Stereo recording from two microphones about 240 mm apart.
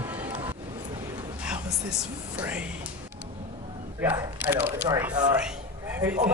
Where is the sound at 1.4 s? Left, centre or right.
Centre.